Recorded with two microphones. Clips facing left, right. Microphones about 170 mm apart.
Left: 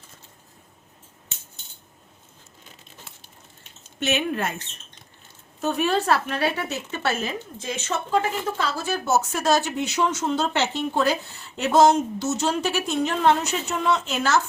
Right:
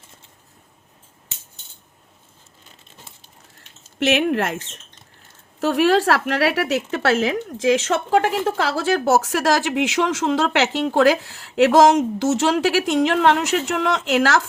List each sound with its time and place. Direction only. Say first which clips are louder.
4.0 s speech: right 6 dB; 80° right